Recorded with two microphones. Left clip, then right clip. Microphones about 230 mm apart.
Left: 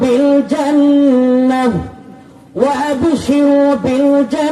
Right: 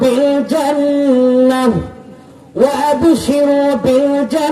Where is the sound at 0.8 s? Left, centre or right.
Right.